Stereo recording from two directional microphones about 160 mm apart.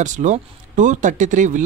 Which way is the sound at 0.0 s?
50° right (ahead or behind).